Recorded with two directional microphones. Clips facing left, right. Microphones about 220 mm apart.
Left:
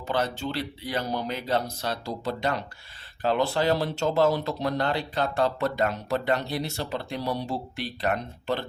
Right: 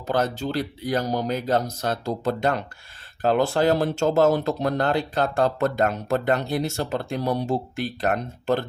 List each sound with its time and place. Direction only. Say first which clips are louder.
0.1 s speech: right 4 dB; 45° right (ahead or behind)